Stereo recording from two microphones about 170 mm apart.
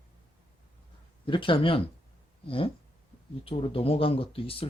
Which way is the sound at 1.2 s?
30° left (ahead or behind).